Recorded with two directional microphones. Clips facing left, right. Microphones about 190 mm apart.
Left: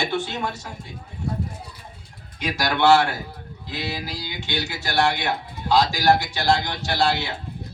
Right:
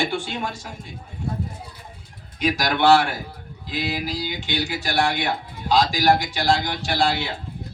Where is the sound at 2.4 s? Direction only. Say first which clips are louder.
Right 1 dB; 15° right (ahead or behind).